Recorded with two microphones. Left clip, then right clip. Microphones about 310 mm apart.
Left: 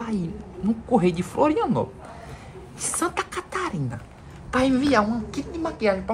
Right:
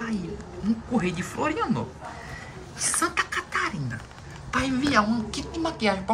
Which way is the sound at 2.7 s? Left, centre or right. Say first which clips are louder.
Right 1 dB; centre.